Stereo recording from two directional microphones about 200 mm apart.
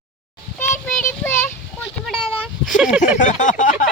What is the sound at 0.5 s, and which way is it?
Child singing, 10° left (ahead or behind).